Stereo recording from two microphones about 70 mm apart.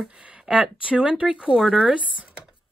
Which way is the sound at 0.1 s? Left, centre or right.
Centre.